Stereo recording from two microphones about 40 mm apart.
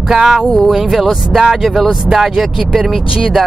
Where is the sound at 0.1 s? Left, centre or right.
Centre.